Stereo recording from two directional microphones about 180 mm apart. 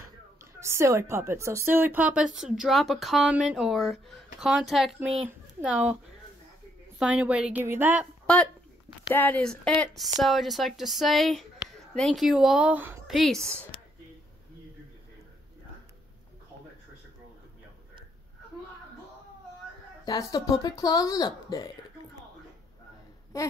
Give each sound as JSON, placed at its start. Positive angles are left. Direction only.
{"t": 0.6, "sound": "a woman's voice", "side_deg": -15}
{"t": 7.0, "sound": "a woman's voice", "side_deg": -5}
{"t": 9.1, "sound": "a woman's voice", "side_deg": 10}
{"t": 13.1, "sound": "a woman's voice", "side_deg": 0}
{"t": 20.1, "sound": "speech", "side_deg": 20}
{"t": 23.3, "sound": "speech", "side_deg": 15}